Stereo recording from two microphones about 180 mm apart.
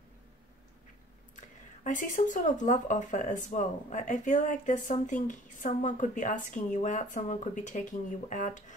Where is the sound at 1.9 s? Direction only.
45° left (ahead or behind).